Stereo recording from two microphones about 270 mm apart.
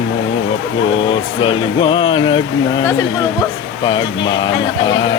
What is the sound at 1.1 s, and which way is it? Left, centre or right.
Speech, centre.